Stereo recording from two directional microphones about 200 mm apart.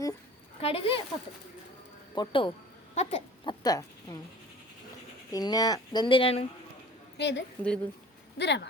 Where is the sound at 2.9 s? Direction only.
35° left (ahead or behind).